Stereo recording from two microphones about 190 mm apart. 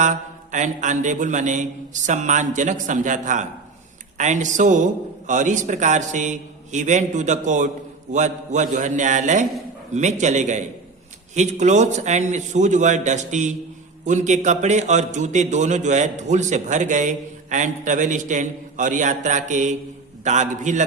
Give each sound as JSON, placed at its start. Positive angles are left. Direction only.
{"t": 0.0, "sound": "a man's voice", "side_deg": -40}